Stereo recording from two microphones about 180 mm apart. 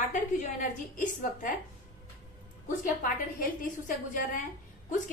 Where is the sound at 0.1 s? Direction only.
45° left (ahead or behind).